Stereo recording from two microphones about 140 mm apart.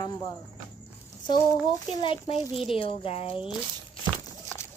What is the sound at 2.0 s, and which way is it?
Speech, 40° left (ahead or behind).